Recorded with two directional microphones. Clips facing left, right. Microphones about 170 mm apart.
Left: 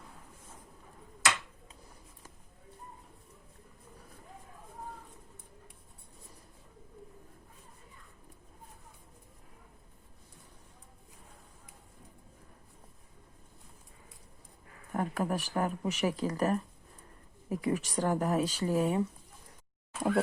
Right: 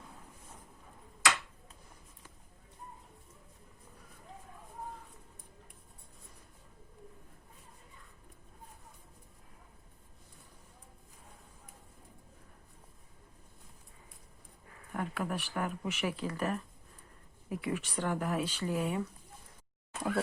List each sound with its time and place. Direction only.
14.9 s speech: 40° left (ahead or behind)